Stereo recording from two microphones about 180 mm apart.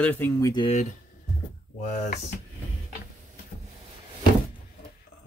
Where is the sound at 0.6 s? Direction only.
40° left (ahead or behind).